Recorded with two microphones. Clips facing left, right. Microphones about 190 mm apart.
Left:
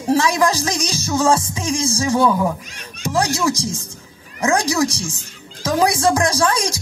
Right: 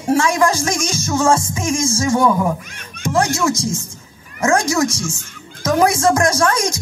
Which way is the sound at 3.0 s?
55° right (ahead or behind).